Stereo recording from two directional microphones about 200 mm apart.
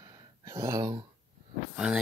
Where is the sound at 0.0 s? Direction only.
15° right (ahead or behind).